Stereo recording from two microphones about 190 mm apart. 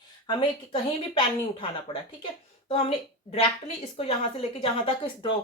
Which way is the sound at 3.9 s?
30° left (ahead or behind).